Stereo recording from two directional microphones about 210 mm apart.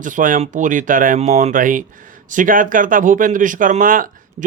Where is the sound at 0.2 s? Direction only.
40° right (ahead or behind).